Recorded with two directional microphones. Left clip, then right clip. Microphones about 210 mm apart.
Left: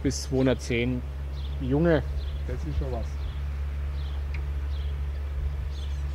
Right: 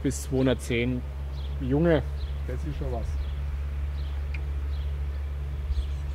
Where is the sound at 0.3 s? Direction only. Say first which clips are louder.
Even; centre (ahead or behind).